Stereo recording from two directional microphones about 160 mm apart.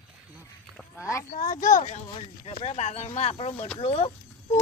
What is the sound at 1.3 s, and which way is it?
Speech, 55° left (ahead or behind).